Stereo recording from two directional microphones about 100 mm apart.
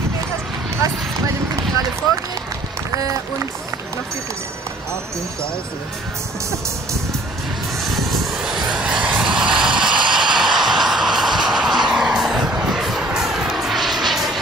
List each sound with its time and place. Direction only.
6.5 s music: 30° right (ahead or behind)
7.8 s vehicle: centre (ahead or behind)